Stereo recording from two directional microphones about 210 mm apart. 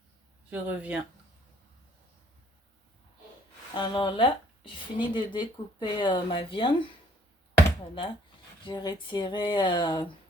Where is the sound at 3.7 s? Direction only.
20° left (ahead or behind).